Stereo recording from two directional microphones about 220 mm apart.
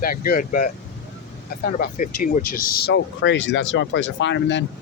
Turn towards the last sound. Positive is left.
turn(degrees=55)  # may be behind; listen again after turning